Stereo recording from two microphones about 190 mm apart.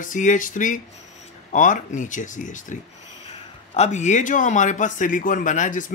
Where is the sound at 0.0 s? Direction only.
45° left (ahead or behind).